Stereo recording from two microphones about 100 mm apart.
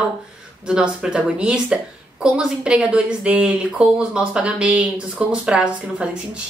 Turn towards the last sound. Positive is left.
turn(degrees=-10)  # may be behind; listen again after turning